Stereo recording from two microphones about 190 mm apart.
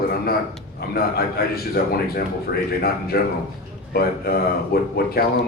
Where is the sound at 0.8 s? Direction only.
55° left (ahead or behind).